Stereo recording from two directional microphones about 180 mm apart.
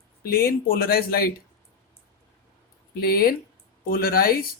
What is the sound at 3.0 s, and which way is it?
Speech, 55° left (ahead or behind).